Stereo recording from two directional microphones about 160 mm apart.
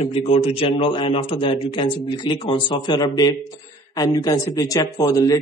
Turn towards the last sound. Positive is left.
turn(degrees=20)  # may be behind; listen again after turning